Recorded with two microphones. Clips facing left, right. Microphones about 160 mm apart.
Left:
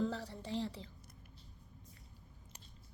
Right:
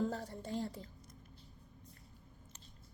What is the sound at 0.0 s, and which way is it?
Speech, 50° right (ahead or behind).